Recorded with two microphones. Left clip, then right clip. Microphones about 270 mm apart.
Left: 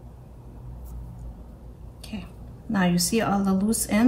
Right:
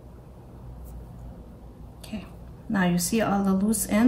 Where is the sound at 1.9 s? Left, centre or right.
Centre.